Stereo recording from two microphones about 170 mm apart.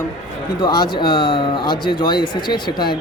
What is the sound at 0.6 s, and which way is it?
Speech, 25° left (ahead or behind).